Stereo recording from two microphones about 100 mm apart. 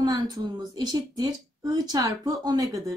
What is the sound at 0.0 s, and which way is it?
A woman's voice, 40° right (ahead or behind).